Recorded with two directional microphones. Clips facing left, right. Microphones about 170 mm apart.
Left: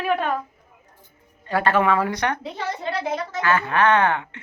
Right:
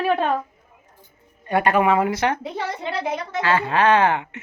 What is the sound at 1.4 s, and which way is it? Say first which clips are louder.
Speech: right 2 dB; 20° right (ahead or behind).